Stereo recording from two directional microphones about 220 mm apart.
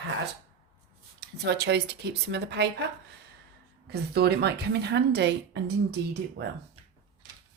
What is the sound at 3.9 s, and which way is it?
Speech, 45° right (ahead or behind).